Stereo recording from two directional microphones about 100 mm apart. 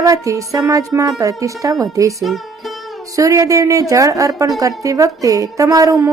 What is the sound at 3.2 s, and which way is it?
A woman's voice, 30° right (ahead or behind).